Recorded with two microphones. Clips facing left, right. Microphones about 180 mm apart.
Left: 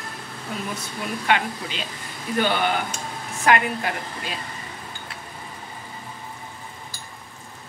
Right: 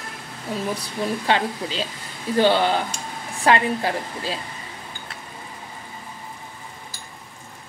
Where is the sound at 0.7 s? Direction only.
30° right (ahead or behind).